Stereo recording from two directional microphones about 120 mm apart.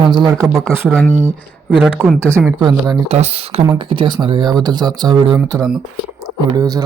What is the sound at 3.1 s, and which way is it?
Speech, 60° right (ahead or behind).